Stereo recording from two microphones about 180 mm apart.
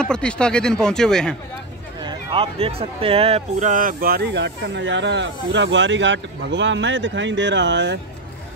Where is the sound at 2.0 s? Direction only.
30° right (ahead or behind); by 8.0 s 80° right.